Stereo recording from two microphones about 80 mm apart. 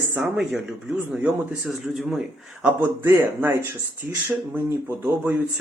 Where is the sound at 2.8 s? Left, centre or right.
Right.